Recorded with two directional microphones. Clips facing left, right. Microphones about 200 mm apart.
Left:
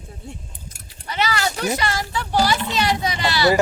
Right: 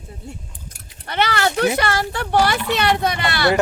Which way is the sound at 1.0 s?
60° right (ahead or behind).